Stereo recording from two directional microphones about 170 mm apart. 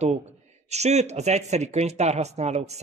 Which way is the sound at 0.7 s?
40° right (ahead or behind).